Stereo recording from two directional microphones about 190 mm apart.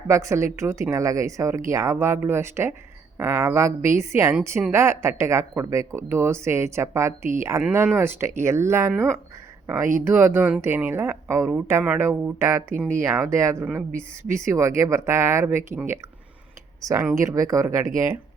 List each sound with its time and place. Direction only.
0.1 s a woman's voice: 15° right (ahead or behind)